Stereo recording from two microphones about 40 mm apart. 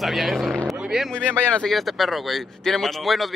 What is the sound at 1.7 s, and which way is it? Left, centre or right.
Speech, centre.